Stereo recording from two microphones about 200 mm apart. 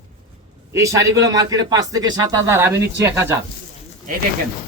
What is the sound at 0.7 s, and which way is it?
A man's voice, 15° right (ahead or behind).